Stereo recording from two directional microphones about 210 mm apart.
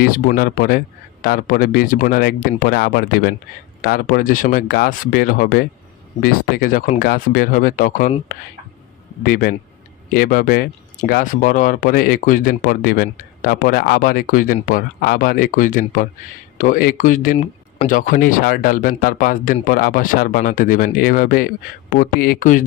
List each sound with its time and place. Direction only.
0.0 s speech: 40° left (ahead or behind)
9.2 s speech: 45° left (ahead or behind)